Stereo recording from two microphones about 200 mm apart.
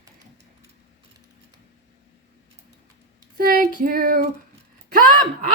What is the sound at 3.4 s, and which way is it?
Child singing, 45° right (ahead or behind).